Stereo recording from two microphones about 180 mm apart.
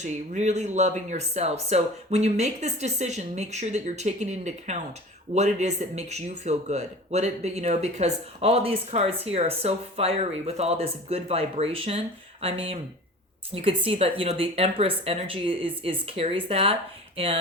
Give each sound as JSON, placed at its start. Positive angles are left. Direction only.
{"t": 0.0, "sound": "speech", "side_deg": -40}